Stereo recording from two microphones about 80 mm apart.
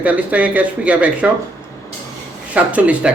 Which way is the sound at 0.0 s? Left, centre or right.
Centre.